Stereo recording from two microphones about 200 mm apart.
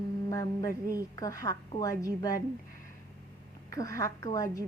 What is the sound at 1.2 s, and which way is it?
A woman's voice, 15° left (ahead or behind).